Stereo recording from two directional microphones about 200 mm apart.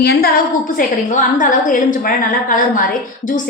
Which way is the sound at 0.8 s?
40° left (ahead or behind).